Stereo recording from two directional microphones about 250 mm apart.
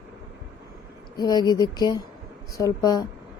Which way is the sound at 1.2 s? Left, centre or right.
Centre.